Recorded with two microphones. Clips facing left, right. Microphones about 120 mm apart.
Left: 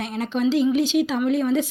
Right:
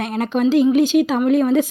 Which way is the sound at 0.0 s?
55° right (ahead or behind).